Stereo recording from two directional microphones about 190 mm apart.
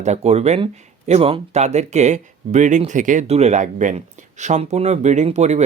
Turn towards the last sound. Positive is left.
turn(degrees=-35)  # may be behind; listen again after turning